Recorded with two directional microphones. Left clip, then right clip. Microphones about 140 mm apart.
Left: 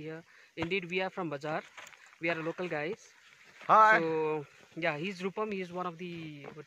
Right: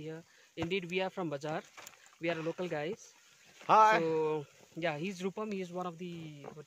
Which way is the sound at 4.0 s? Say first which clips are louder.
Left 1 dB; centre (ahead or behind).